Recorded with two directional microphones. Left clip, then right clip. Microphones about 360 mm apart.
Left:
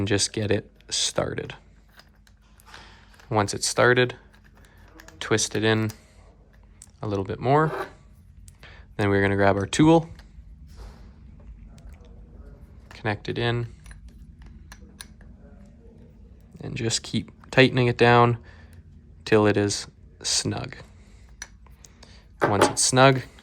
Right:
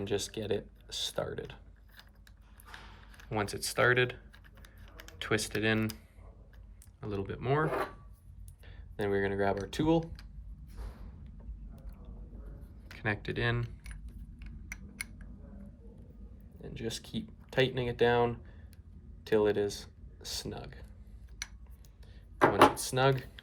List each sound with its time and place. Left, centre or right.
0.0 s speech: centre
3.2 s speech: centre
7.0 s speech: centre
12.9 s speech: centre
16.7 s speech: centre
19.2 s speech: centre
22.7 s speech: centre